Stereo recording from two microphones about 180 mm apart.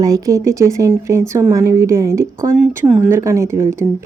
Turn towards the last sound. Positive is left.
turn(degrees=-15)  # may be behind; listen again after turning